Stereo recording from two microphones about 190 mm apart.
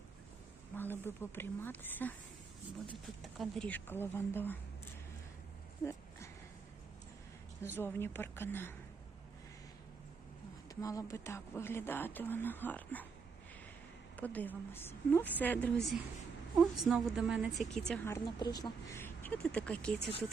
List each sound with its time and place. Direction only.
0.8 s speech: 10° left (ahead or behind)
3.2 s speech: centre (ahead or behind)
5.8 s a sound: 15° left (ahead or behind)
7.8 s speech: 10° left (ahead or behind)
10.7 s speech: 15° left (ahead or behind)
14.2 s a woman's voice: 10° left (ahead or behind)
17.8 s speech: 10° left (ahead or behind)
18.3 s speech: 20° left (ahead or behind)
20.0 s speech: 30° left (ahead or behind)